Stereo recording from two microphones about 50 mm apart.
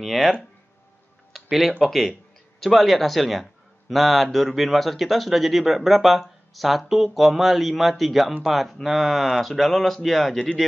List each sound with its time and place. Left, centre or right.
0.0 s speech: centre
1.3 s tick-tock: centre
1.8 s speech: centre